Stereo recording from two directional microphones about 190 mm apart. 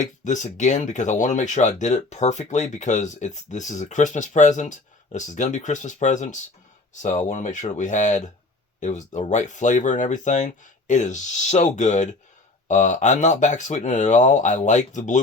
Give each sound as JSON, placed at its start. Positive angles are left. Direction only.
{"t": 0.0, "sound": "speech", "side_deg": 40}